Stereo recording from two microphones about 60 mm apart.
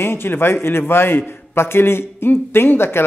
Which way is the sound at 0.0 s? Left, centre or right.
Left.